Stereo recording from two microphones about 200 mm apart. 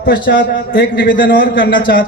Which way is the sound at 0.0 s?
55° left (ahead or behind).